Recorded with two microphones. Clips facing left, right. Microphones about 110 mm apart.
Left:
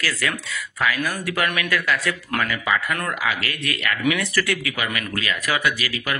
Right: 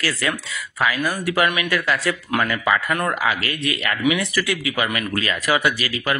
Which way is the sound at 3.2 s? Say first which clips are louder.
Right 3 dB; 35° right (ahead or behind).